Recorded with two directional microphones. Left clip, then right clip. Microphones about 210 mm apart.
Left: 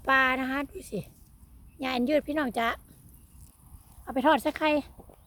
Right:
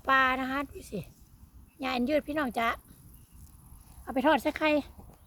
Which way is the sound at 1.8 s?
25° left (ahead or behind).